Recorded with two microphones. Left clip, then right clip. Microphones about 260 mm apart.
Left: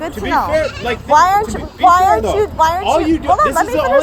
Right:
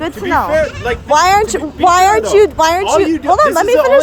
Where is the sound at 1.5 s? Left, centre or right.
Right.